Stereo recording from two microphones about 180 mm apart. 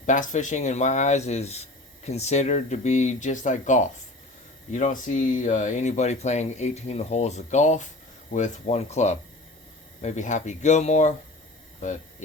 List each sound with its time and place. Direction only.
0.0 s speech: 45° left (ahead or behind)